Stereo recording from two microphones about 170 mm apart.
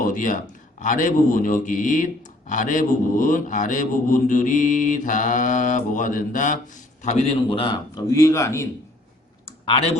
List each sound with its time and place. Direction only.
0.0 s mantra: 50° left (ahead or behind); by 8.6 s 15° left (ahead or behind)
9.6 s speech: 30° left (ahead or behind)